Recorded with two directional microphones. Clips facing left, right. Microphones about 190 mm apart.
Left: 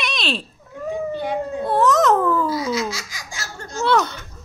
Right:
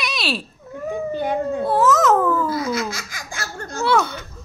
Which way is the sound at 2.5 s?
55° right (ahead or behind).